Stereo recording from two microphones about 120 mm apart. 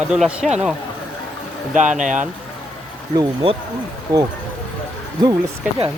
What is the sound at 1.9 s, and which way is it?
Speech, 90° right.